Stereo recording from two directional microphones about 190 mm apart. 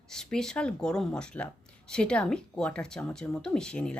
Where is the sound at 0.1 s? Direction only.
5° left (ahead or behind).